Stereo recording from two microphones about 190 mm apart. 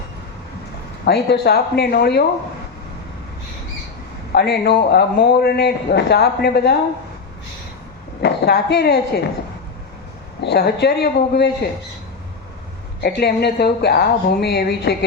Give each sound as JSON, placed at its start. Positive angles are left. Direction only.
{"t": 1.0, "sound": "a man's voice", "side_deg": 60}
{"t": 4.3, "sound": "a man's voice", "side_deg": 60}
{"t": 8.2, "sound": "a man's voice", "side_deg": 60}
{"t": 10.4, "sound": "a man's voice", "side_deg": 60}
{"t": 13.0, "sound": "a man's voice", "side_deg": 55}